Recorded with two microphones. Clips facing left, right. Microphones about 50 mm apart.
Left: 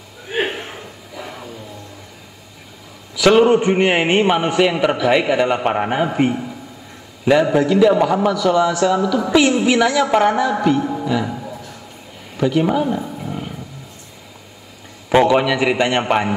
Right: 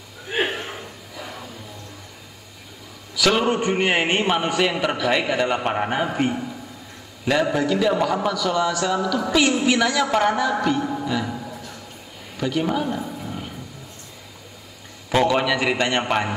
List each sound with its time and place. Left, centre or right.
0.3 s a sound: centre
3.2 s a man's voice: centre
11.1 s music: centre
12.4 s roaring cats: centre
15.0 s a man's voice: centre